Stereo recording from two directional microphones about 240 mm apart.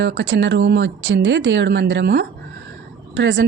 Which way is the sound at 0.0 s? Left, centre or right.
Right.